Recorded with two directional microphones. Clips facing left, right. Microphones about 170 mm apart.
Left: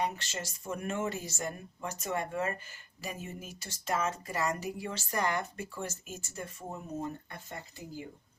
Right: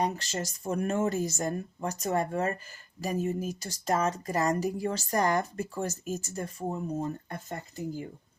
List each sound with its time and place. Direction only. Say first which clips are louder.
0.0 s speech: right 4 dB; 35° right (ahead or behind)